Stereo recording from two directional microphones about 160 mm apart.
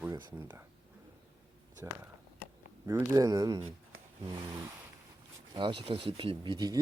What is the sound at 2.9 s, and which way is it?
Speech, 20° right (ahead or behind).